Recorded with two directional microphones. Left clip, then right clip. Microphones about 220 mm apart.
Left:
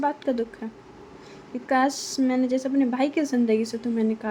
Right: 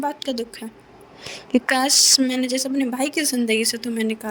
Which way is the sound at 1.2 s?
50° right (ahead or behind).